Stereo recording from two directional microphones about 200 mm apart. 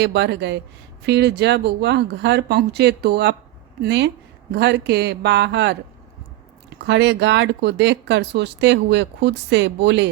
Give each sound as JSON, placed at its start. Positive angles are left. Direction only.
{"t": 0.0, "sound": "speech", "side_deg": -55}
{"t": 6.8, "sound": "speech", "side_deg": -60}